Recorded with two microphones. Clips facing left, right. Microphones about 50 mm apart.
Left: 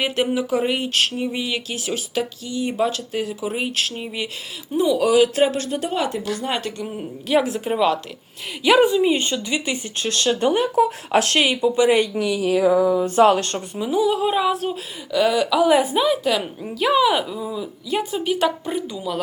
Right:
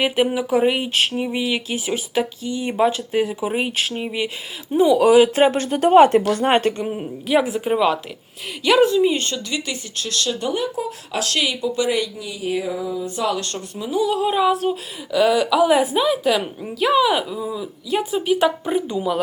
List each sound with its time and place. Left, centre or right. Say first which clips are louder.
0.0 s speech: right 2 dB; centre
4.9 s speech: right 2 dB; right
6.8 s speech: right 3 dB; centre
8.6 s speech: even; centre
10.1 s speech: left 4 dB; left
12.1 s speech: left 5 dB; left
13.1 s speech: left 9 dB; left
13.7 s speech: left 1 dB; centre